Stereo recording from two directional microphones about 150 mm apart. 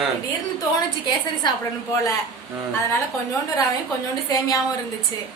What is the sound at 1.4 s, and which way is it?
Speech, 30° left (ahead or behind).